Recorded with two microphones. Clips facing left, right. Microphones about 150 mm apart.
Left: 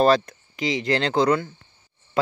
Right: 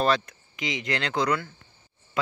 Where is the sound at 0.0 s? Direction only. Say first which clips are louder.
Left 6 dB; 35° left (ahead or behind).